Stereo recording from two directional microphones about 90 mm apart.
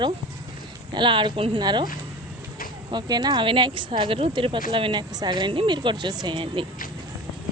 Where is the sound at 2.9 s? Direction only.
50° right (ahead or behind).